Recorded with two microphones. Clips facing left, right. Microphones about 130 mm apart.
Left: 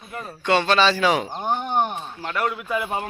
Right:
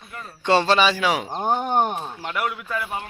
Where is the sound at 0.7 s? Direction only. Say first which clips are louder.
Left 1 dB; 10° right (ahead or behind).